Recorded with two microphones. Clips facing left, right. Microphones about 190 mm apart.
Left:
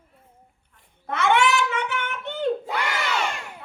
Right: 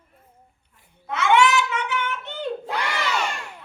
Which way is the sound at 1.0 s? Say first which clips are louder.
Right 2 dB; 55° left (ahead or behind).